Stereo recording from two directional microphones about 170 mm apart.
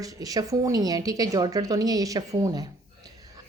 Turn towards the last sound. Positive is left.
turn(degrees=-20)  # may be behind; listen again after turning